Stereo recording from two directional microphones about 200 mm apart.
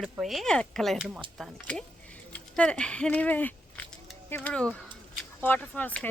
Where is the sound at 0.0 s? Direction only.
Centre (ahead or behind).